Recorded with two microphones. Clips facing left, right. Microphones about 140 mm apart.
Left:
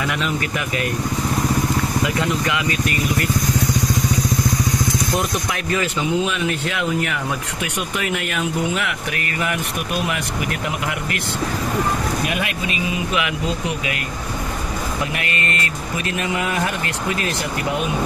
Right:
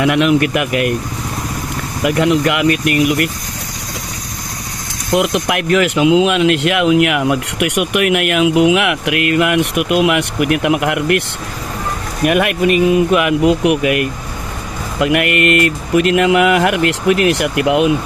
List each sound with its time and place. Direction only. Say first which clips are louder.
0.0 s speech: right 11 dB; 75° right (ahead or behind)
2.0 s speech: right 8 dB; 70° right (ahead or behind)
5.1 s speech: right 8 dB; 90° right; by 11.2 s 65° right (ahead or behind)
12.3 s speech: right 11 dB; 60° right (ahead or behind)
15.0 s speech: right 16 dB; 70° right (ahead or behind); by 17.9 s 90° right